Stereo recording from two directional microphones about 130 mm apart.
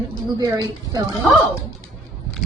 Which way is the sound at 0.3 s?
30° right (ahead or behind).